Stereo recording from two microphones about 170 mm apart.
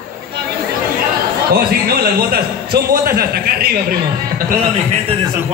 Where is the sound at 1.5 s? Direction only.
65° right (ahead or behind).